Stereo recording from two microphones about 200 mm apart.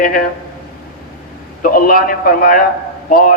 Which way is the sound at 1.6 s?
45° left (ahead or behind).